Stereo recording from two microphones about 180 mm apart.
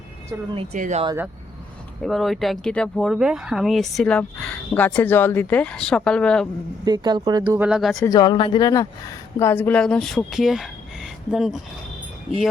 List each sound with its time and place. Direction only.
0.5 s speech: 40° right (ahead or behind)
2.0 s speech: centre (ahead or behind)
6.8 s speech: 25° right (ahead or behind)
7.6 s speech: 5° right (ahead or behind)
8.0 s speech: 20° left (ahead or behind); by 11.5 s centre (ahead or behind)